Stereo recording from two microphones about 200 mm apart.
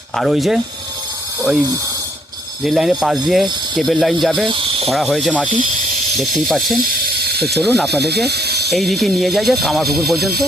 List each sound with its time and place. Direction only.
0.2 s speech: centre (ahead or behind)
2.6 s speech: centre (ahead or behind)
7.2 s ratchet: 50° right (ahead or behind)
7.5 s speech: centre (ahead or behind)
7.9 s speech: 55° right (ahead or behind)
8.7 s speech: centre (ahead or behind)